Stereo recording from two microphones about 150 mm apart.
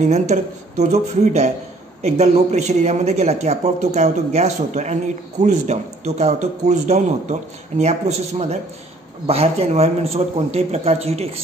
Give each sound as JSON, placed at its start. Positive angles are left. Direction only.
{"t": 0.0, "sound": "speech", "side_deg": -50}